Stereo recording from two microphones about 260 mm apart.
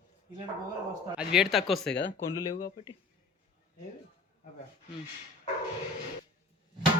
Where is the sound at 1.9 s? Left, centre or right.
Left.